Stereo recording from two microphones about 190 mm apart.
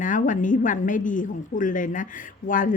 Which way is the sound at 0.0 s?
45° left (ahead or behind).